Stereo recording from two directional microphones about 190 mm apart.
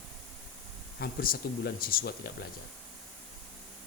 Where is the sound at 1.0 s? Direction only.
50° left (ahead or behind).